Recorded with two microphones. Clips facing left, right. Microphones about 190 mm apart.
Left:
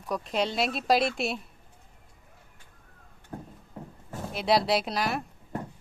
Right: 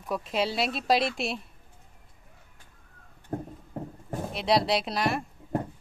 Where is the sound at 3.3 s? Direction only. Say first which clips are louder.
Right 7 dB; 40° right (ahead or behind).